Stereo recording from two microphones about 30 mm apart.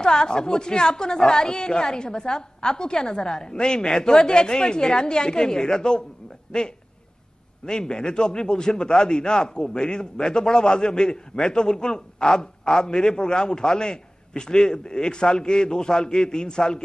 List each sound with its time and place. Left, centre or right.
0.0 s a man's voice: left
7.6 s a man's voice: left